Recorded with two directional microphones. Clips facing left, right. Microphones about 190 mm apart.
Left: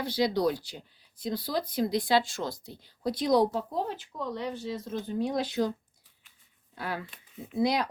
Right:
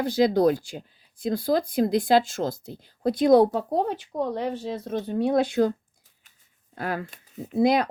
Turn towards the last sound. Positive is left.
turn(degrees=-50)  # may be behind; listen again after turning